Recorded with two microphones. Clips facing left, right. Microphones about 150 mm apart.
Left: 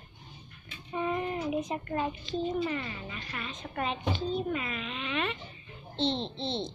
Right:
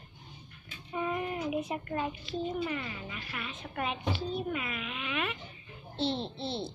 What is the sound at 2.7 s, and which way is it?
Speech, 10° right (ahead or behind).